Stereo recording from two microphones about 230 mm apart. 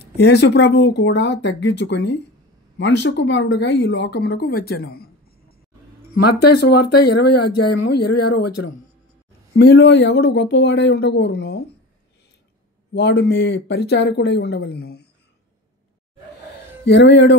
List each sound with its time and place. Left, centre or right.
0.2 s a woman's voice: left
7.4 s speech: left
9.5 s a woman's voice: left
12.9 s a woman's voice: left
16.8 s a woman's voice: left